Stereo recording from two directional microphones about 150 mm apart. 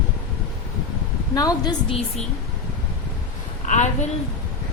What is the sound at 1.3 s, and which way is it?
Speech, 25° left (ahead or behind).